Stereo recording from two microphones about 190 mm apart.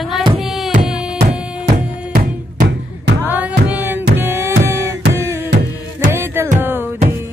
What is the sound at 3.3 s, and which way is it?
Music, 10° right (ahead or behind).